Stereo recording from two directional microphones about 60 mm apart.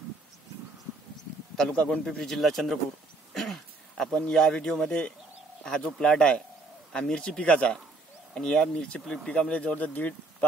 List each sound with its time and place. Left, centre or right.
1.7 s a man's voice: centre
3.3 s a sound: centre
4.3 s speech: centre